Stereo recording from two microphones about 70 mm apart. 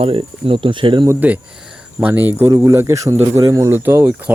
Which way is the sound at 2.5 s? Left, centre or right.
Right.